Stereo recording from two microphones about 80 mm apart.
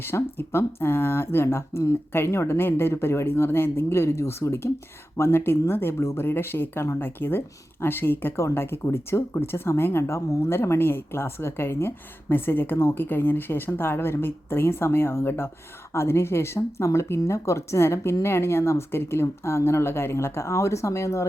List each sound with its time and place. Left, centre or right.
0.0 s speech: left